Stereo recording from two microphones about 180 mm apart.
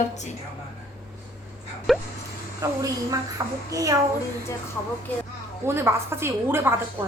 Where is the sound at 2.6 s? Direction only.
20° right (ahead or behind).